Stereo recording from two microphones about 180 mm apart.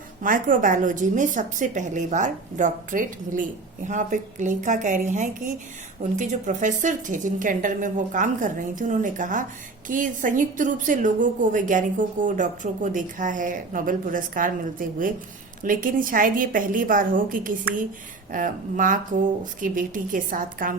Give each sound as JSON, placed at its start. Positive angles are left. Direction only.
{"t": 0.2, "sound": "a woman's voice", "side_deg": -50}